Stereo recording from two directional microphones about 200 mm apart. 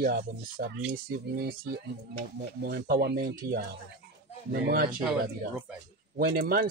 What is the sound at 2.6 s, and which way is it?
Speech, 50° right (ahead or behind).